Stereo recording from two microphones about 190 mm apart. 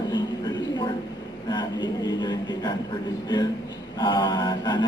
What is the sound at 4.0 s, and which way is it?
Speech, 20° left (ahead or behind).